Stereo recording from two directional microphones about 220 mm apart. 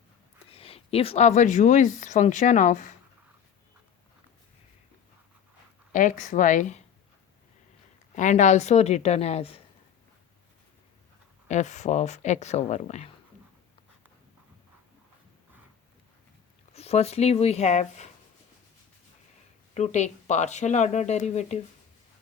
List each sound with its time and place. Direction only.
0.5 s a woman's voice: 25° left (ahead or behind)
5.9 s a woman's voice: 35° left (ahead or behind)
8.1 s speech: 35° left (ahead or behind)
11.4 s a woman's voice: 30° left (ahead or behind)
16.7 s speech: 30° left (ahead or behind)
19.7 s a woman's voice: 30° left (ahead or behind)